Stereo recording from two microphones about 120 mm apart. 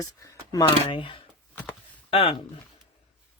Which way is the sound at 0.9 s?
45° left (ahead or behind).